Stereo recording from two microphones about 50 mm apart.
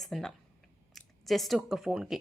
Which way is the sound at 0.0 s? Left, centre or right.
Centre.